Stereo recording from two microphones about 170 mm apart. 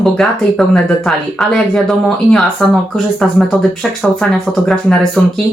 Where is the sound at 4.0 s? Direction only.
Centre (ahead or behind).